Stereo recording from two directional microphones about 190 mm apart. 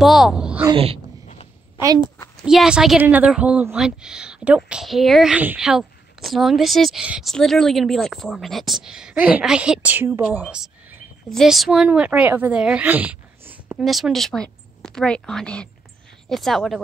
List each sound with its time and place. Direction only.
0.0 s a woman's voice: centre (ahead or behind)
0.7 s speech: 30° right (ahead or behind)
2.4 s a woman's voice: 5° right (ahead or behind)